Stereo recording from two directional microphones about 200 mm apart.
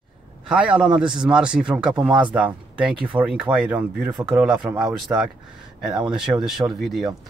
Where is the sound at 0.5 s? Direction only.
5° right (ahead or behind).